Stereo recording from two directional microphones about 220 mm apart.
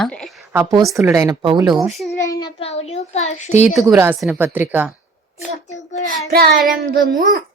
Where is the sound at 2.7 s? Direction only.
30° left (ahead or behind).